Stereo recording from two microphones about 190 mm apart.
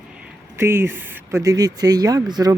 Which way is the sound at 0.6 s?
15° right (ahead or behind).